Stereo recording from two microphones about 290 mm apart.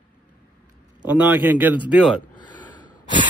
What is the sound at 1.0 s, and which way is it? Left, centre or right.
A man's voice, centre.